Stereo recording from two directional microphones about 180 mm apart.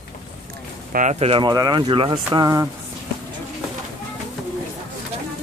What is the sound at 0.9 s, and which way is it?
Speech, 40° right (ahead or behind).